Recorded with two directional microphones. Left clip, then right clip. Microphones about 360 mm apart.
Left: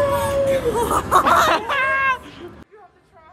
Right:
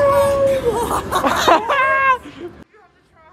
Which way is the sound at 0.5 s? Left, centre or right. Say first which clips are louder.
Right 1 dB; centre.